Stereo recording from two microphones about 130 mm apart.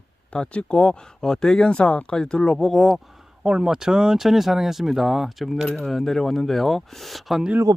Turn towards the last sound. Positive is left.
turn(degrees=-5)  # may be behind; listen again after turning